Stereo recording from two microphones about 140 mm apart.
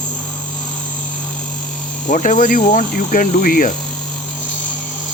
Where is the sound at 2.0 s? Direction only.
65° left (ahead or behind).